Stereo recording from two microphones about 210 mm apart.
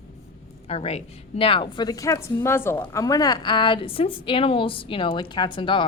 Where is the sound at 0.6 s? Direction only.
30° left (ahead or behind).